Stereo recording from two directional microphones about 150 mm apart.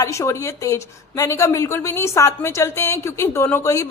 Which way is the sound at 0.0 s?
20° left (ahead or behind).